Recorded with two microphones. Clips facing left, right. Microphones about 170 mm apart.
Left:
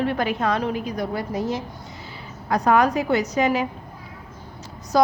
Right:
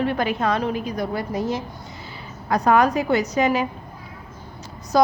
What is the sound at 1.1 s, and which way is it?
Speech, 60° right (ahead or behind).